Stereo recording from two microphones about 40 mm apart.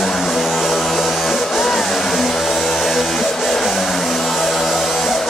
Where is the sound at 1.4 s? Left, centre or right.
Centre.